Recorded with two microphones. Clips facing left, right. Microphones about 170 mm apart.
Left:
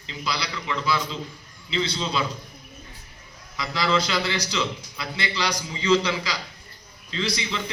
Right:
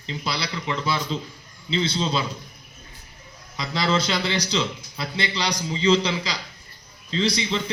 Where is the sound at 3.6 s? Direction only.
25° right (ahead or behind).